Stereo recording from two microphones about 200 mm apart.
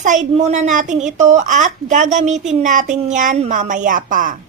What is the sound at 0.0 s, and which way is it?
A woman's voice, 40° right (ahead or behind).